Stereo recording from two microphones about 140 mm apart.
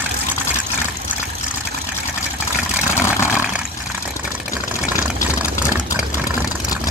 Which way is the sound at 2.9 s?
20° left (ahead or behind).